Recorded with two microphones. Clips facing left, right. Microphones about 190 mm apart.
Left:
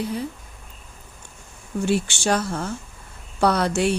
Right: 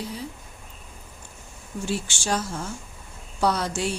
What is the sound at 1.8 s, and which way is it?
Speech, 65° left (ahead or behind).